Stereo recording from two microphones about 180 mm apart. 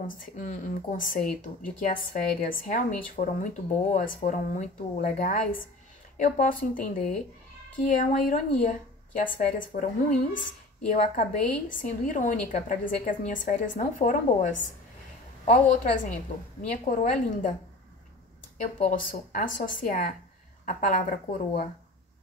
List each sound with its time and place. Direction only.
0.0 s a woman's voice: 45° left (ahead or behind)
18.6 s a woman's voice: 45° left (ahead or behind)